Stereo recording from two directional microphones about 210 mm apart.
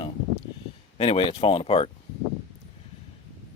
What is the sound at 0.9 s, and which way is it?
Speech, 25° left (ahead or behind).